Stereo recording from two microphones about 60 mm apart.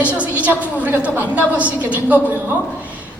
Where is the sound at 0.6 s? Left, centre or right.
Right.